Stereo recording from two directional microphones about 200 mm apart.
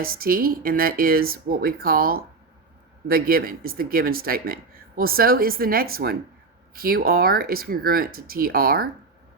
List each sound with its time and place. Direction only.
0.0 s speech: 45° right (ahead or behind)